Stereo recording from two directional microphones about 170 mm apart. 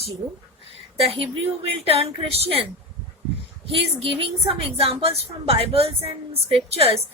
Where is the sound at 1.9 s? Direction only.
35° right (ahead or behind).